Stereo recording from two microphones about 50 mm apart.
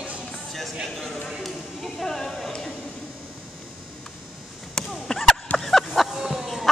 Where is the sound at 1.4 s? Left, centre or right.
Centre.